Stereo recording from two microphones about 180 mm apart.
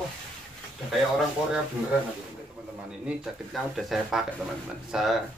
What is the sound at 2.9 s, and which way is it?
Speech, 5° right (ahead or behind).